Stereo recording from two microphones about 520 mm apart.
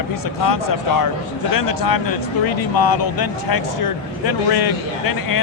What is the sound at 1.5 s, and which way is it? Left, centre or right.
Speech, left.